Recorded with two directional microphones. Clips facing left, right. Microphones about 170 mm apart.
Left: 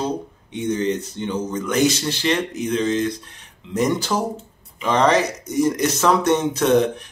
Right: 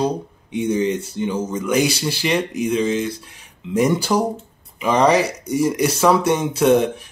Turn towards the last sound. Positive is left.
turn(degrees=-10)  # may be behind; listen again after turning